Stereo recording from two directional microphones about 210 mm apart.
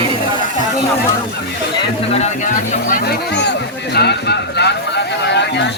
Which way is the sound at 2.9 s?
50° left (ahead or behind).